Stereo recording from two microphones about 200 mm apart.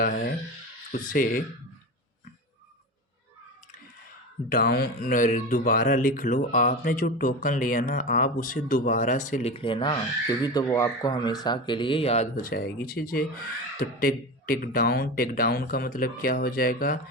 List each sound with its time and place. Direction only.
0.0 s speech: 45° left (ahead or behind)
4.5 s speech: 50° left (ahead or behind)